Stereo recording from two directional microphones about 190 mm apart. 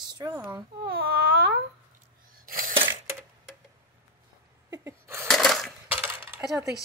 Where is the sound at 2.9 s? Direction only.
15° right (ahead or behind).